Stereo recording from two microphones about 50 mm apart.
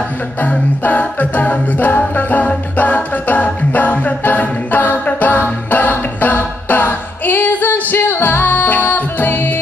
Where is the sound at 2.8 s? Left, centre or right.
Left.